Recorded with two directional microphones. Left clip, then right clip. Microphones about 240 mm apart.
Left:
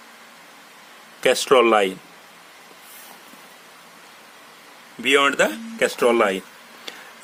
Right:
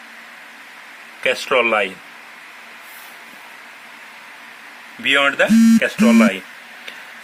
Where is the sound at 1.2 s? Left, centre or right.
Left.